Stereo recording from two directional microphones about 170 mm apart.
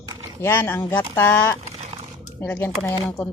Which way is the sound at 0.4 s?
15° left (ahead or behind).